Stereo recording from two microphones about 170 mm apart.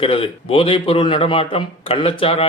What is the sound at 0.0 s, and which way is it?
A man's voice, 30° left (ahead or behind).